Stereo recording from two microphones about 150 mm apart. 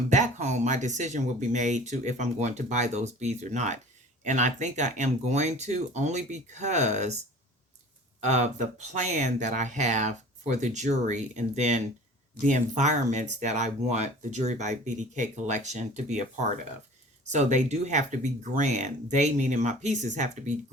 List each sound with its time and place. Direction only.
0.1 s speech: 55° right (ahead or behind)
8.2 s speech: 50° right (ahead or behind)